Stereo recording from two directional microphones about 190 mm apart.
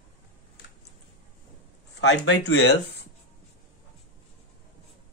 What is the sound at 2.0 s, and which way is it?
Speech, 65° left (ahead or behind).